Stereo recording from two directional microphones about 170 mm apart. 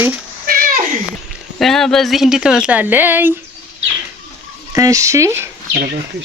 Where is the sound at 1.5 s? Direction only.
Centre (ahead or behind).